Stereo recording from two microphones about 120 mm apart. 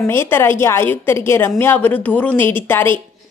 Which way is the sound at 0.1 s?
20° left (ahead or behind).